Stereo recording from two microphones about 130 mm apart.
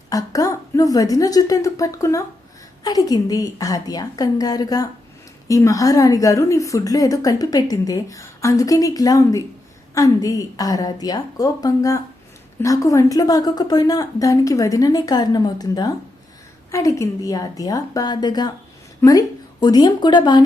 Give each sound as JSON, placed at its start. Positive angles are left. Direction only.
{"t": 0.1, "sound": "a woman's voice", "side_deg": 25}